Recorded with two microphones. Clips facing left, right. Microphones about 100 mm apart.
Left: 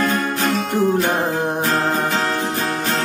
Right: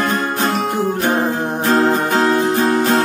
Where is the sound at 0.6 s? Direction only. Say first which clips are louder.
Even; 15° right (ahead or behind).